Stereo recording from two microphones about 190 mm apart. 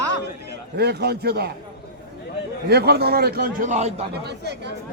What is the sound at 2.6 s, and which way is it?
A man's voice, 55° right (ahead or behind).